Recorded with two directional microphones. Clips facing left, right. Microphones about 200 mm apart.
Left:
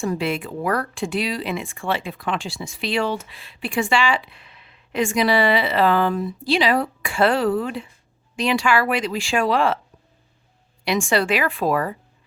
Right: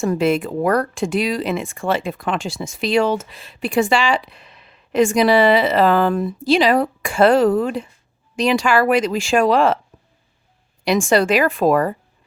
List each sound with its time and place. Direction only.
0.0 s speech: 45° right (ahead or behind)
10.8 s speech: 40° right (ahead or behind)